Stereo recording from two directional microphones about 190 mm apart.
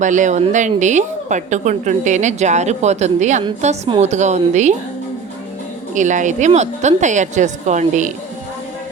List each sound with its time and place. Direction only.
0.0 s a woman's voice: 40° right (ahead or behind)
5.9 s a woman's voice: 40° right (ahead or behind)